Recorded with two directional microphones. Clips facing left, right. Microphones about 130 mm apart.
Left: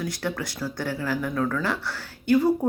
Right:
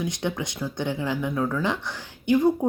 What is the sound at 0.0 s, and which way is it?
Speech, 20° right (ahead or behind).